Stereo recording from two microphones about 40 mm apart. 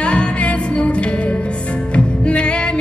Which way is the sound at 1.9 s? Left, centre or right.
Left.